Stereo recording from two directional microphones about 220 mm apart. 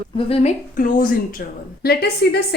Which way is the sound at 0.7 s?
40° left (ahead or behind).